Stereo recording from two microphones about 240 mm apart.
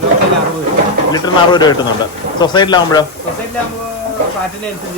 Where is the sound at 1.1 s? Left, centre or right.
Centre.